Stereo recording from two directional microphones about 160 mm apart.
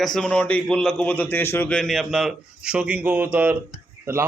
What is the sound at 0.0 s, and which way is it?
A man's voice, 5° left (ahead or behind).